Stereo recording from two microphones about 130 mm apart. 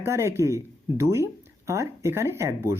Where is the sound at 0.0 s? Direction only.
20° right (ahead or behind).